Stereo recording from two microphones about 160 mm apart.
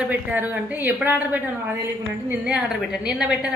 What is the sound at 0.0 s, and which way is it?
A woman's voice, 10° right (ahead or behind).